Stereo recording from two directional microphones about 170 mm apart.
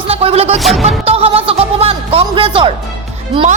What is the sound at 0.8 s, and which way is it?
A woman's voice, 35° right (ahead or behind).